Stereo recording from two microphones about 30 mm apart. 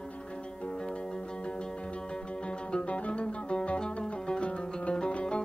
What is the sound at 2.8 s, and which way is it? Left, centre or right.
Music, left.